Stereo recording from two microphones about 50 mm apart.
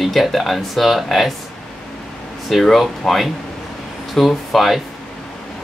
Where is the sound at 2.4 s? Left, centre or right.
Centre.